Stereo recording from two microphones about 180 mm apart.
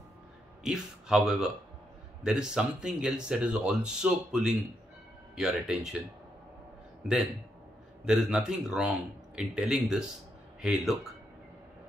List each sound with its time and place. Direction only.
0.7 s speech: centre (ahead or behind)
8.0 s speech: 5° right (ahead or behind)